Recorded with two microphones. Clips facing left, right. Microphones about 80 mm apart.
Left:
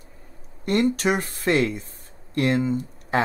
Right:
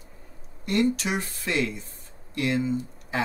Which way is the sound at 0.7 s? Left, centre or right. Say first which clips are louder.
Left 3 dB; left.